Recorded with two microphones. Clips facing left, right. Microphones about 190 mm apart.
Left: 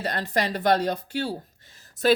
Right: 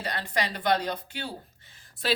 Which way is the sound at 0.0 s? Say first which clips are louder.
Left 4 dB; 45° left (ahead or behind).